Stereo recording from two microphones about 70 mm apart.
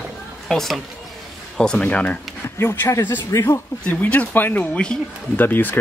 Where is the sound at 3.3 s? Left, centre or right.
Left.